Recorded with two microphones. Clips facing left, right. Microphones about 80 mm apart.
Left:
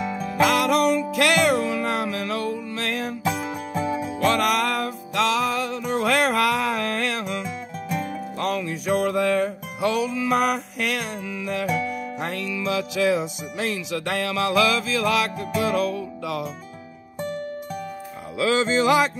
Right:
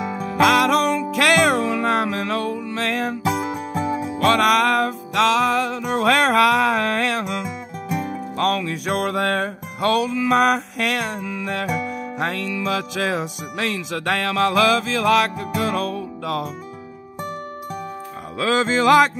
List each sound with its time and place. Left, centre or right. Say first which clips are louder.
0.0 s music: right 1 dB; centre
0.4 s music: right 3 dB; right
3.3 s music: right 3 dB; centre
4.2 s music: right 5 dB; right
7.4 s music: right 2 dB; centre
8.4 s music: right 5 dB; right
12.2 s speech: right 7 dB; right